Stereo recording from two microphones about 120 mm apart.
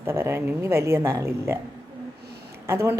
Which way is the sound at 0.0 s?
20° right (ahead or behind).